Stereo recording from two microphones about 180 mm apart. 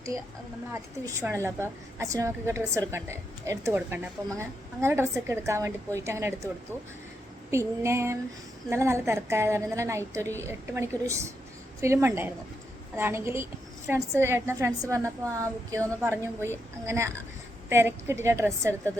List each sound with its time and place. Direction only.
0.7 s a woman's voice: 15° right (ahead or behind)
7.5 s a woman's voice: 15° right (ahead or behind)